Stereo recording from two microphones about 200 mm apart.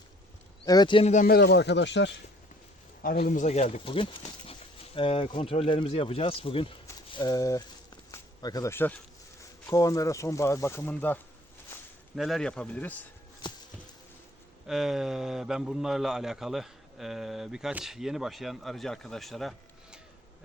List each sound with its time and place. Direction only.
0.6 s speech: 20° left (ahead or behind); by 2.1 s 60° left (ahead or behind)
3.0 s speech: 45° left (ahead or behind); by 7.6 s 15° left (ahead or behind)
8.1 s a sound: 20° left (ahead or behind)
9.6 s a man's voice: 15° left (ahead or behind)
14.7 s a man's voice: 5° right (ahead or behind)